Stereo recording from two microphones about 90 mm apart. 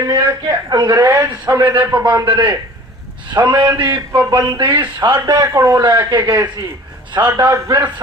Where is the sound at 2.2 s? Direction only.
60° right (ahead or behind).